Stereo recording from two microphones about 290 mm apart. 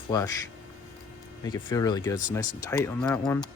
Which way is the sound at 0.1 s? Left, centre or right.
Centre.